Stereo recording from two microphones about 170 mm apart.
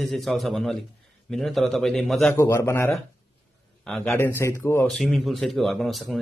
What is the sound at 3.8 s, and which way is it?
Speech, centre (ahead or behind).